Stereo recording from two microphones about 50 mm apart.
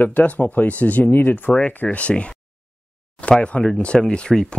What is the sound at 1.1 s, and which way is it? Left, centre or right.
Speech, left.